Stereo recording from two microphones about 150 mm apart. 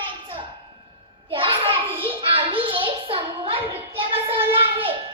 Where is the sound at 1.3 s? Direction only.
35° right (ahead or behind).